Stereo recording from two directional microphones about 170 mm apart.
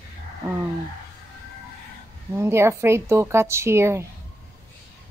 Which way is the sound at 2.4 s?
15° right (ahead or behind).